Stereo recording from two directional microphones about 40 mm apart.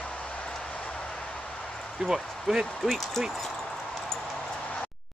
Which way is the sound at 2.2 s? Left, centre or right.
Centre.